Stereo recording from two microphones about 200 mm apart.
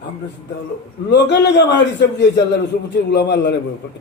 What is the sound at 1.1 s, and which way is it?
A man's voice, 60° left (ahead or behind).